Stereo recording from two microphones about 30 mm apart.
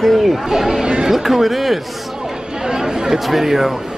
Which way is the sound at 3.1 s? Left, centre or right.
Centre.